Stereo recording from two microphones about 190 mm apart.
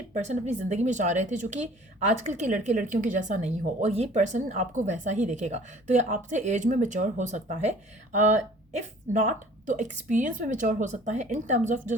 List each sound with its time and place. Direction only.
0.1 s speech: 40° right (ahead or behind)